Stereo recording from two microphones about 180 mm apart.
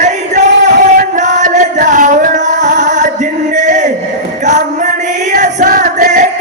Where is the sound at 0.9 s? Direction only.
45° right (ahead or behind).